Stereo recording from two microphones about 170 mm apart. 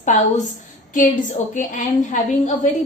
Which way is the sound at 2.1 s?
50° left (ahead or behind).